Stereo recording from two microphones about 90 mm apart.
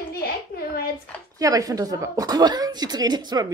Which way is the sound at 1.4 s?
40° right (ahead or behind).